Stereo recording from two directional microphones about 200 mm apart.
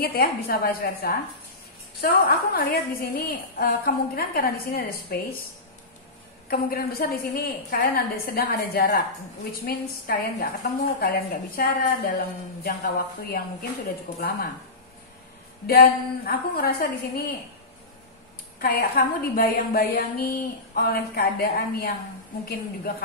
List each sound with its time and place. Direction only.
0.0 s a woman's voice: 50° left (ahead or behind)
6.5 s a woman's voice: 50° left (ahead or behind)
15.6 s a woman's voice: 50° left (ahead or behind)
18.6 s a woman's voice: 45° left (ahead or behind)